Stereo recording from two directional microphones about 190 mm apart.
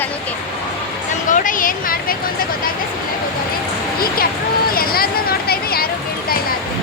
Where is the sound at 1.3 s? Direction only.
45° left (ahead or behind).